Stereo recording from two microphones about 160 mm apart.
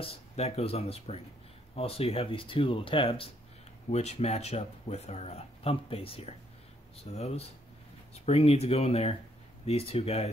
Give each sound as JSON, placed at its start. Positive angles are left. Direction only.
{"t": 0.0, "sound": "speech", "side_deg": 40}